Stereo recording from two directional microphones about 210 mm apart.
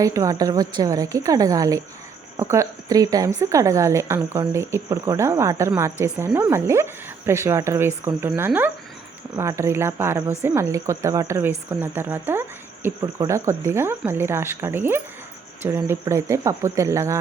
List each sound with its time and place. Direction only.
0.0 s speech: 15° right (ahead or behind)